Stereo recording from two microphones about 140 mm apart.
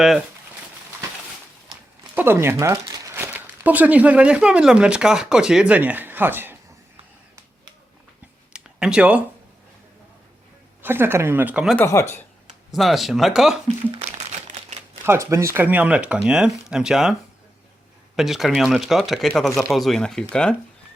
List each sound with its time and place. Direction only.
2.1 s speech: 15° right (ahead or behind)
8.5 s a sound: 5° right (ahead or behind)
10.8 s speech: 15° right (ahead or behind)
11.8 s speech: 20° left (ahead or behind)
12.7 s speech: centre (ahead or behind)
13.9 s crumpling: 50° right (ahead or behind)
15.0 s speech: 20° right (ahead or behind); by 17.2 s 5° right (ahead or behind)
18.2 s speech: centre (ahead or behind)